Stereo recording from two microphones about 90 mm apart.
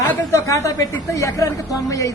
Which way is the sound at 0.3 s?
35° left (ahead or behind).